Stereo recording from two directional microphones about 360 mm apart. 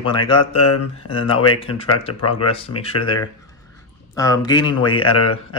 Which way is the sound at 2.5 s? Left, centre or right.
Centre.